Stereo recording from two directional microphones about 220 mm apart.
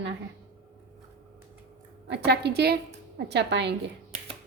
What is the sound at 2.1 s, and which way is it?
A woman's voice, 50° right (ahead or behind).